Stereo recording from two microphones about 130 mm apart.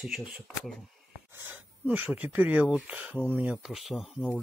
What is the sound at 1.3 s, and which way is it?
Speech, 15° right (ahead or behind).